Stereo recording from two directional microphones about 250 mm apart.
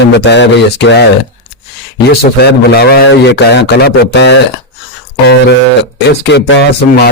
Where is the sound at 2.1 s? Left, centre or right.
Left.